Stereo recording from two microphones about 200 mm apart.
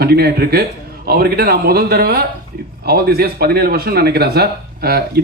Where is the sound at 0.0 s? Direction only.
50° right (ahead or behind).